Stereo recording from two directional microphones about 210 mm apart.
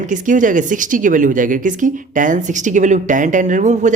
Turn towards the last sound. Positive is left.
turn(degrees=-35)  # may be behind; listen again after turning